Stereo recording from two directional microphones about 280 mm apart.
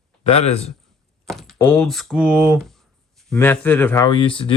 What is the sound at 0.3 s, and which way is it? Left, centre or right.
Speech, left.